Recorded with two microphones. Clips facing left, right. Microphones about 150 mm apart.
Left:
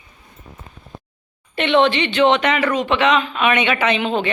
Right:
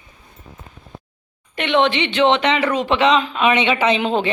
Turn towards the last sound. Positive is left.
turn(degrees=-30)  # may be behind; listen again after turning